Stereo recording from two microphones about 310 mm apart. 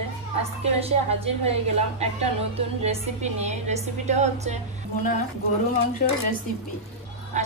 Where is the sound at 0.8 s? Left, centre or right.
Centre.